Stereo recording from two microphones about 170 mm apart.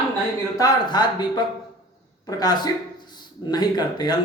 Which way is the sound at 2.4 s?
25° left (ahead or behind).